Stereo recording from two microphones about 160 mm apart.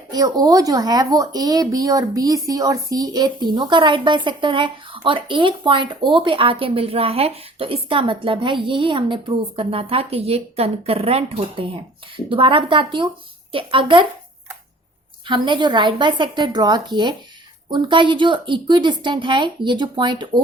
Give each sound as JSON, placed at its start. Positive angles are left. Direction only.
{"t": 0.1, "sound": "speech", "side_deg": -25}
{"t": 15.3, "sound": "a woman's voice", "side_deg": -30}